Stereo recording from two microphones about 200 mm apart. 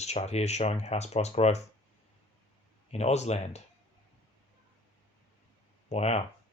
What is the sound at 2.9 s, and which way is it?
Speech, 35° left (ahead or behind).